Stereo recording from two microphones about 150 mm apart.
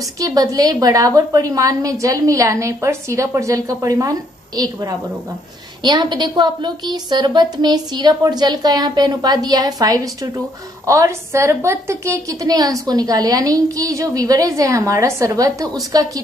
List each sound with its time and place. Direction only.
0.2 s a woman's voice: 25° right (ahead or behind)